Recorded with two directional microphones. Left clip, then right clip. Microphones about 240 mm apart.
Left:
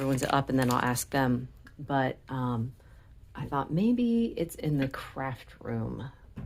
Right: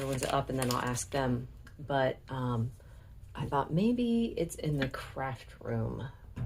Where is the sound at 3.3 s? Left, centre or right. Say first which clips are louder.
Even; left.